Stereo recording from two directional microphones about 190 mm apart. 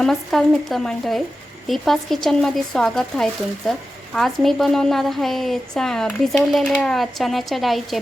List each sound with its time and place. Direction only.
0.0 s speech: centre (ahead or behind)